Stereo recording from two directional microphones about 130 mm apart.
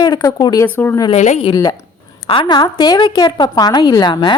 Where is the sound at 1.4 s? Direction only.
35° left (ahead or behind).